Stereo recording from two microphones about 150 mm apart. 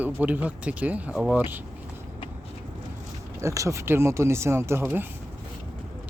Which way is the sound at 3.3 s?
20° right (ahead or behind).